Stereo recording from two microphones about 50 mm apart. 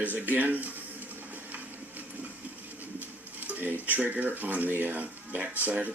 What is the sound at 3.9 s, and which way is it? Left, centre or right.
Speech, right.